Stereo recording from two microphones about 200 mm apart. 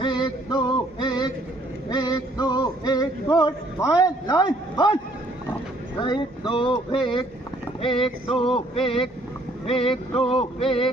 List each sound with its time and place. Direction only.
0.0 s music: 20° left (ahead or behind)
6.0 s speech: 25° left (ahead or behind)
7.8 s a sound: 25° left (ahead or behind)